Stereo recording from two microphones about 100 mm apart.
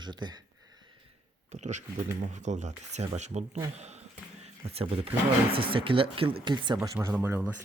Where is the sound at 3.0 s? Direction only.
70° right (ahead or behind).